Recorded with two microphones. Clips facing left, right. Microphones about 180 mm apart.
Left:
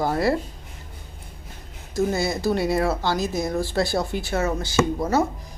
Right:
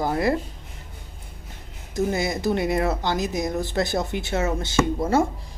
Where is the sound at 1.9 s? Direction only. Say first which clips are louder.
Left 1 dB; 20° right (ahead or behind).